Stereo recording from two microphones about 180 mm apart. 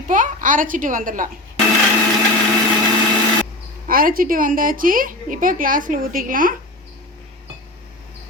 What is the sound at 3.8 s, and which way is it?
A woman's voice, 50° right (ahead or behind).